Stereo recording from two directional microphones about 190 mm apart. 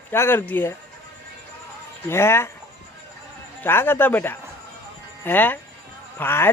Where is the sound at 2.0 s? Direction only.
15° left (ahead or behind).